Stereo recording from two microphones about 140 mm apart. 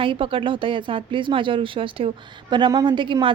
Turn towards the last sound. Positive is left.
turn(degrees=-35)  # may be behind; listen again after turning